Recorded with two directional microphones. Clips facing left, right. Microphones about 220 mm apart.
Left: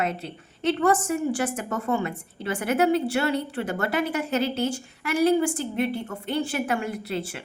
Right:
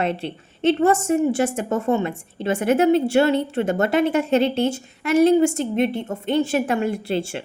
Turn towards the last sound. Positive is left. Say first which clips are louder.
# right 6 dB
turn(degrees=-30)  # may be behind; listen again after turning